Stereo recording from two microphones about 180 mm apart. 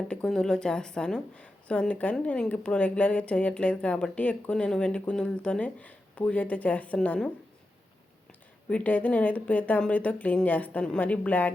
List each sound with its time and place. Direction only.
0.1 s a woman's voice: 5° left (ahead or behind)
8.7 s a woman's voice: 10° left (ahead or behind)